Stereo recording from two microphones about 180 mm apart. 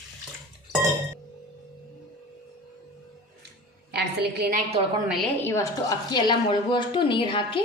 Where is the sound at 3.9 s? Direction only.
65° right (ahead or behind).